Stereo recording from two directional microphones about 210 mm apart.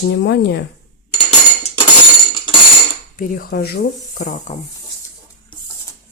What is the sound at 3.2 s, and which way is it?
Speech, 45° left (ahead or behind).